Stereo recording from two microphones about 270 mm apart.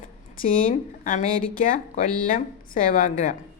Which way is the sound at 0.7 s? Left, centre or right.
Left.